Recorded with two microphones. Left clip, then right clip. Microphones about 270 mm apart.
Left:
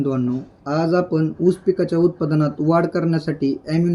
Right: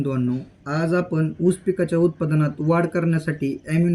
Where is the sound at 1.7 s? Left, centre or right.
Right.